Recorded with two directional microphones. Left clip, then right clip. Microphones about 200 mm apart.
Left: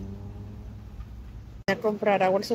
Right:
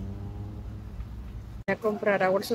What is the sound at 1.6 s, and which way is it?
Speech, 15° left (ahead or behind).